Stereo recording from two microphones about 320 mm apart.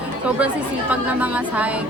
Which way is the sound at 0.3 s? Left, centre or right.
Centre.